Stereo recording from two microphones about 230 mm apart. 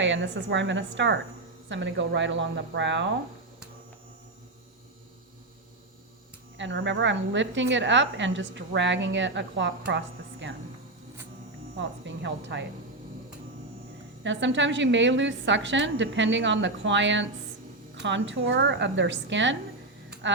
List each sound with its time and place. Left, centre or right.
0.0 s a woman's voice: right
6.6 s a woman's voice: right
11.8 s a woman's voice: right
14.3 s a woman's voice: right